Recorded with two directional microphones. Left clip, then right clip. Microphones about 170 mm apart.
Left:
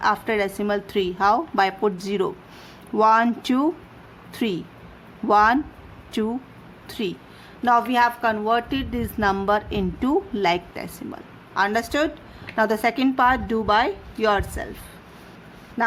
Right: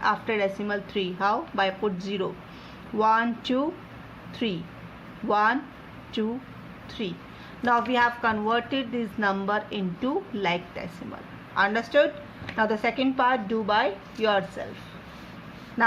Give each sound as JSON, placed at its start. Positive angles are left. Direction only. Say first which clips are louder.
{"t": 0.0, "sound": "a woman's voice", "louder": "left 3 dB", "side_deg": 50}
{"t": 7.6, "sound": "a woman's voice", "louder": "left 4 dB", "side_deg": 45}